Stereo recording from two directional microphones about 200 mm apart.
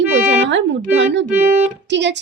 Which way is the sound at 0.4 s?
60° right (ahead or behind).